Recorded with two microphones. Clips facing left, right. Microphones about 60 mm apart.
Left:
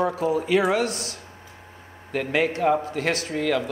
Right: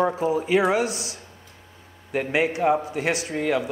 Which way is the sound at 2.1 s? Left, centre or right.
Centre.